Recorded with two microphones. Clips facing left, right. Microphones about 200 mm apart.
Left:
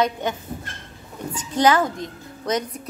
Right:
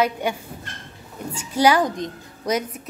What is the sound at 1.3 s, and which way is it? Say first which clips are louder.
Speech: even; 10° right (ahead or behind).